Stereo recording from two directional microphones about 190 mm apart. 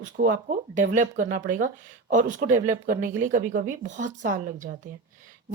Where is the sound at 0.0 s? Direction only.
45° right (ahead or behind).